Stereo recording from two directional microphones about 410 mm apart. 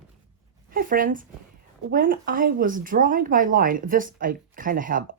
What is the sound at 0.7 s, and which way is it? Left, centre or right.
Speech, right.